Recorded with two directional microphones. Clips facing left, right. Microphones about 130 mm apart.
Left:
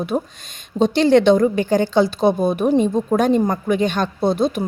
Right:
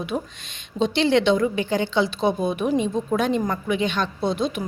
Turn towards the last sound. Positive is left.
turn(degrees=40)  # may be behind; listen again after turning